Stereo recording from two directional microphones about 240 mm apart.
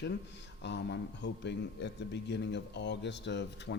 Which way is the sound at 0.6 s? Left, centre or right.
Left.